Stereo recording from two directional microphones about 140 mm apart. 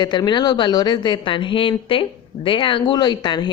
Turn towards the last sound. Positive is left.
turn(degrees=30)  # may be behind; listen again after turning